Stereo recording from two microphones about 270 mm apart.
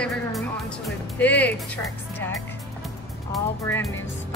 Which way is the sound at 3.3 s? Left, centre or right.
Centre.